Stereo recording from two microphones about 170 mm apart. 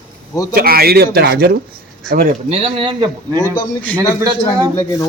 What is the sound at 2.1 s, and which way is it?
Speech, 50° right (ahead or behind).